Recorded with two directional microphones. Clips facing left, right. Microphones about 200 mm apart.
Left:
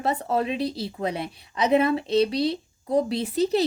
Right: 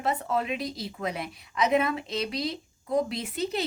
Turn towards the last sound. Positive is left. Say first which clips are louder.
# left 8 dB
turn(degrees=35)  # may be behind; listen again after turning